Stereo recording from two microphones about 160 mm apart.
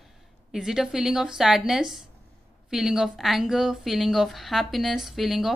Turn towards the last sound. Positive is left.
turn(degrees=0)  # may be behind; listen again after turning